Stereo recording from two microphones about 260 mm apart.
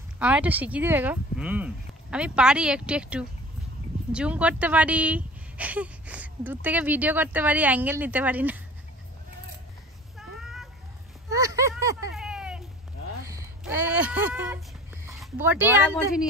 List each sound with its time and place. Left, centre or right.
0.2 s speech: centre
10.1 s cat: centre
11.2 s a sound: centre
15.0 s speech: centre